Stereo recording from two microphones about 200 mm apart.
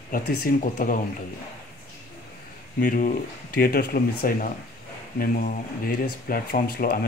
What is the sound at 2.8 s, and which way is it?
Speech, 40° left (ahead or behind).